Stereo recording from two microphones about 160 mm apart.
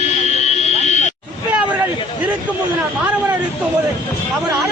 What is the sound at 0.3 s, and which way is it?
Fire alarm, 45° left (ahead or behind).